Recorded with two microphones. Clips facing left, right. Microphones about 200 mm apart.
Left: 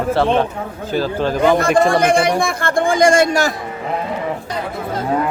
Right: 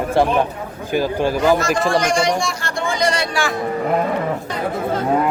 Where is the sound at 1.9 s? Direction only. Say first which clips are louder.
Left 3 dB; 55° left (ahead or behind).